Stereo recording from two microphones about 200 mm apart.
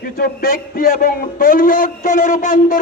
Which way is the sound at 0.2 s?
50° left (ahead or behind).